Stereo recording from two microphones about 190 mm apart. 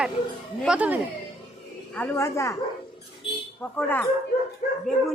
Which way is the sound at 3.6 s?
10° left (ahead or behind).